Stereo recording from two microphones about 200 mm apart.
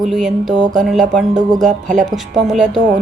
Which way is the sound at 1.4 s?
20° right (ahead or behind).